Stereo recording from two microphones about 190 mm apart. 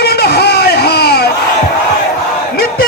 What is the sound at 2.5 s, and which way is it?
Battle cry, 55° left (ahead or behind).